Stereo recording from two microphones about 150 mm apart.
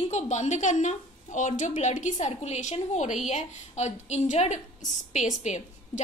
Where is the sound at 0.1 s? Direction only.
50° left (ahead or behind).